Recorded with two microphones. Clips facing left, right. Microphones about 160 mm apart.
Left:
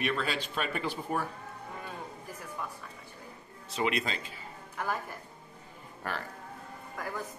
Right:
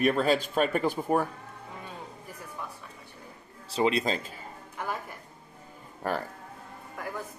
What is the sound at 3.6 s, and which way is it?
Speech, 30° right (ahead or behind).